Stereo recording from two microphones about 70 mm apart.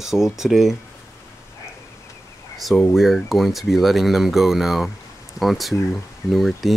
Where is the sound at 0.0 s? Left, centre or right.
Centre.